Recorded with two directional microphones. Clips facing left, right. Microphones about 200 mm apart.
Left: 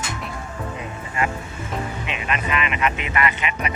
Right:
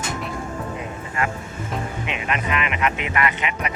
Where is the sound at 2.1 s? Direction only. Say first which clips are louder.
Right 1 dB; 15° right (ahead or behind).